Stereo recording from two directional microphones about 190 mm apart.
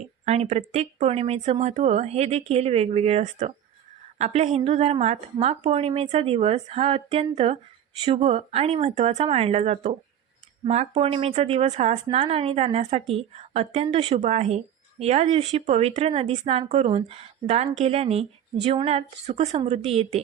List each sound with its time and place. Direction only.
0.3 s speech: 35° right (ahead or behind)